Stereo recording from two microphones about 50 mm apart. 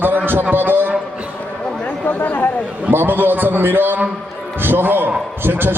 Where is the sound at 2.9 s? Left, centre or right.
Right.